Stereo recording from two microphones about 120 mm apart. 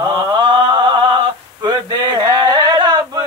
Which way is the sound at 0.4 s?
40° right (ahead or behind).